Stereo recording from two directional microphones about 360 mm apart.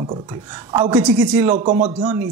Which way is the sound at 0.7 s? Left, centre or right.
Centre.